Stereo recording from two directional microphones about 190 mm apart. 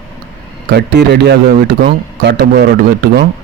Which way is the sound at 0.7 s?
60° right (ahead or behind).